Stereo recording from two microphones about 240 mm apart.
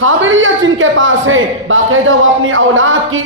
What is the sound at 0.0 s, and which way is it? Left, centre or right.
A man's voice, right.